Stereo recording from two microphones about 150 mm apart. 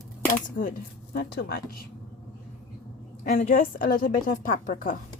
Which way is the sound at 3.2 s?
65° left (ahead or behind).